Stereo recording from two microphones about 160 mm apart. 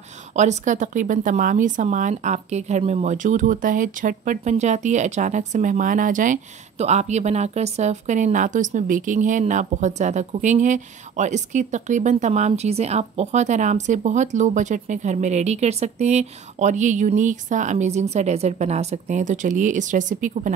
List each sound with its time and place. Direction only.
0.3 s speech: 50° right (ahead or behind)